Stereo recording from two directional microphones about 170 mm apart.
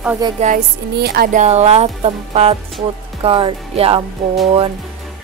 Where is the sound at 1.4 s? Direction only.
40° right (ahead or behind).